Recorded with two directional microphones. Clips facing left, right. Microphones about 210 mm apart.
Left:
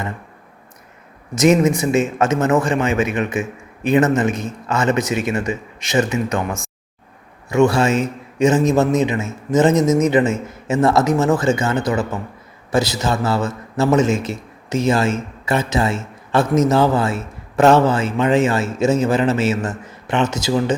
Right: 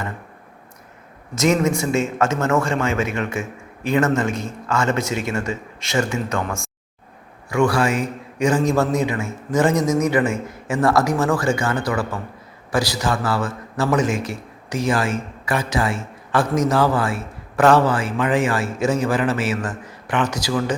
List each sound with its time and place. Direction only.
1.4 s a man's voice: 20° left (ahead or behind)